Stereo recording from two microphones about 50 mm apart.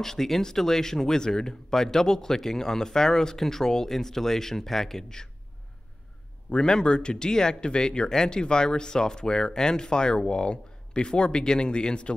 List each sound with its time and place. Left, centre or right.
0.0 s speech: centre
6.5 s speech: centre